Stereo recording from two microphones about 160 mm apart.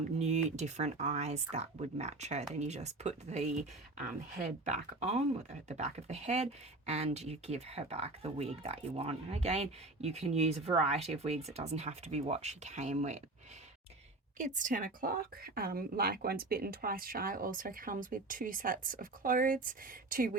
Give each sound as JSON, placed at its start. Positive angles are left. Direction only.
{"t": 0.2, "sound": "speech", "side_deg": -45}
{"t": 4.6, "sound": "speech", "side_deg": -45}
{"t": 14.3, "sound": "a woman's voice", "side_deg": -55}